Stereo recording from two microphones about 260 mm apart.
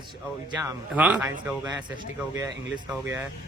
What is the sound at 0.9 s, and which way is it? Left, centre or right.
Speech, centre.